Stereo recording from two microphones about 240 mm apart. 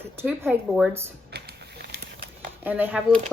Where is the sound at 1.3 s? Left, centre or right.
Right.